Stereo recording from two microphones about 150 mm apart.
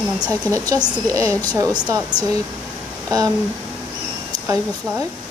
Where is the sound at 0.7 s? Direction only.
25° right (ahead or behind).